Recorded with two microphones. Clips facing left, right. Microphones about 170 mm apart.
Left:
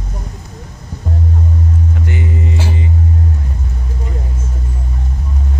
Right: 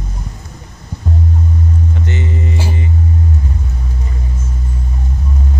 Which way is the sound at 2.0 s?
10° left (ahead or behind).